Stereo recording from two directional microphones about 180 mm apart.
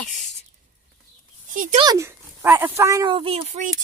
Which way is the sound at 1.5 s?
50° right (ahead or behind).